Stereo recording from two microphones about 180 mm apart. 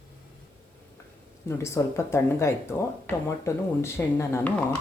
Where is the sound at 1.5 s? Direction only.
15° left (ahead or behind).